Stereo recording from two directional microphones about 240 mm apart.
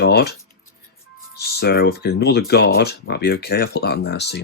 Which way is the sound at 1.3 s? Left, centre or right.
Left.